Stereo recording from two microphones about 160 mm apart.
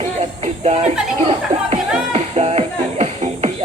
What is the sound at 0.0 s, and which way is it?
Music, 45° right (ahead or behind).